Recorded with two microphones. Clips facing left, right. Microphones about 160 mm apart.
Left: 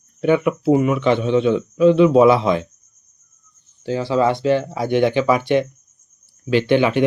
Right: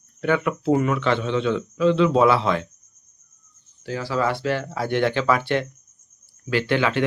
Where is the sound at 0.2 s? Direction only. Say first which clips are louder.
Left 5 dB; 20° left (ahead or behind).